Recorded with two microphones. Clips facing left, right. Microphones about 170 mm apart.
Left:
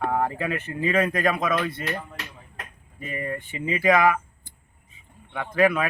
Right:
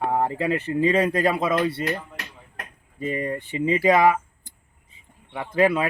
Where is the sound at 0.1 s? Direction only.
25° right (ahead or behind).